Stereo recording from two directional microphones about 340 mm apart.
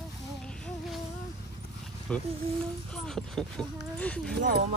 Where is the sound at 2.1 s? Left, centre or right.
Centre.